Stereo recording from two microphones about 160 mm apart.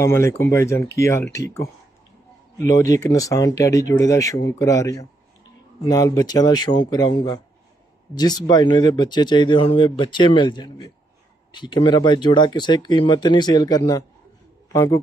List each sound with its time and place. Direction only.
0.0 s a man's voice: 15° left (ahead or behind)